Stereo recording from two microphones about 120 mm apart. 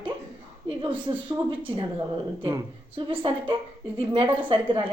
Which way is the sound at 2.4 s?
25° right (ahead or behind).